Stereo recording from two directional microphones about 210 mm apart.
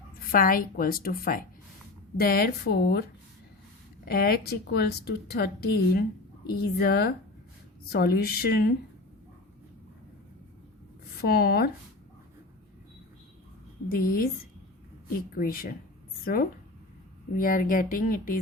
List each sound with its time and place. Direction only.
0.3 s a woman's voice: 45° left (ahead or behind)
4.0 s a woman's voice: 45° left (ahead or behind)
11.2 s a woman's voice: 45° left (ahead or behind)
13.8 s a woman's voice: 45° left (ahead or behind)
15.4 s a woman's voice: 45° left (ahead or behind)